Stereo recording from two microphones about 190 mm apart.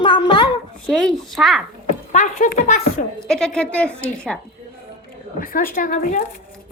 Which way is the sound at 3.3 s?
5° left (ahead or behind).